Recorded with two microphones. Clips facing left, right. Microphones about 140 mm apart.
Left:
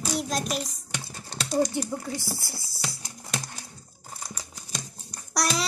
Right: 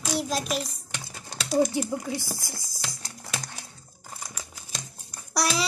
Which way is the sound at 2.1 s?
15° right (ahead or behind).